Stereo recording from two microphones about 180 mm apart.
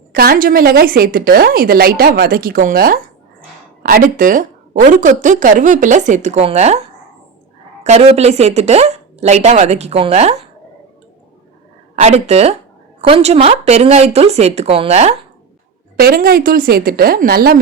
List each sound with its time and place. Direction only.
0.1 s a woman's voice: 55° right (ahead or behind); by 6.8 s 35° right (ahead or behind)
7.9 s speech: 35° right (ahead or behind)
11.9 s speech: 40° right (ahead or behind)
16.0 s a woman's voice: 55° right (ahead or behind)